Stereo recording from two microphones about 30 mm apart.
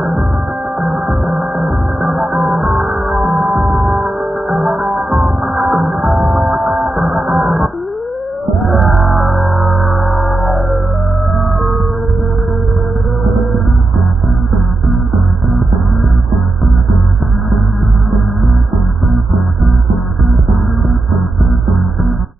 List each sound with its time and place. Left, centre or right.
0.7 s music: centre
2.5 s music: centre
5.1 s music: centre
5.7 s music: centre
7.0 s music: right
8.6 s music: centre